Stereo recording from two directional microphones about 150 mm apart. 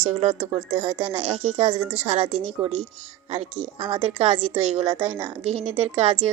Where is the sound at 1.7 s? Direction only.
15° right (ahead or behind).